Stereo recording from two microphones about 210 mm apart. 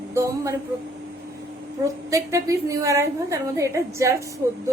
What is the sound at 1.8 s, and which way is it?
A woman's voice, 15° right (ahead or behind).